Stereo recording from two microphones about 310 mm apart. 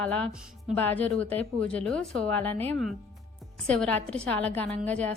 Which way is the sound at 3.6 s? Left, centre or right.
Centre.